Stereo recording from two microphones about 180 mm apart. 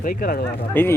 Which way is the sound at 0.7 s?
10° left (ahead or behind).